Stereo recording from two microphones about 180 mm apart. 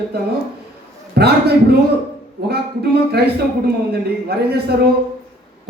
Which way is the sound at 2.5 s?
65° right (ahead or behind).